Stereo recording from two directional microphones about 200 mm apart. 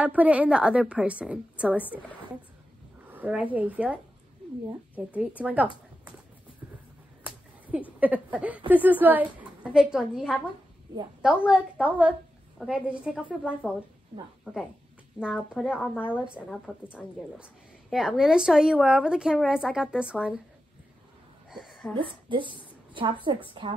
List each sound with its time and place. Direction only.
0.0 s a woman's voice: 5° right (ahead or behind)
3.1 s a sound: 5° right (ahead or behind)
3.5 s a woman's voice: 5° right (ahead or behind)
7.2 s a sound: 5° right (ahead or behind)
8.0 s a woman's voice: 10° right (ahead or behind)
11.4 s a woman's voice: 5° right (ahead or behind)
16.2 s a woman's voice: 5° right (ahead or behind)
21.5 s a sound: centre (ahead or behind)
21.9 s a woman's voice: 25° right (ahead or behind)